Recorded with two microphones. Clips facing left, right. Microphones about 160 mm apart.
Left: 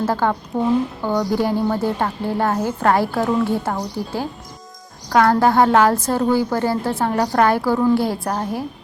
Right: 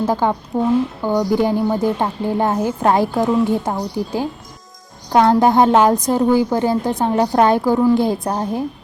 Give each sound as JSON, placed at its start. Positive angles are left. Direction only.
{"t": 0.0, "sound": "a woman's voice", "side_deg": -15}